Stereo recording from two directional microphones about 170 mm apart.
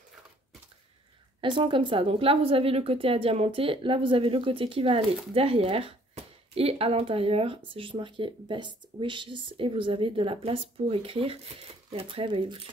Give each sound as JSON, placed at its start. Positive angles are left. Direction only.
{"t": 1.4, "sound": "a woman's voice", "side_deg": -30}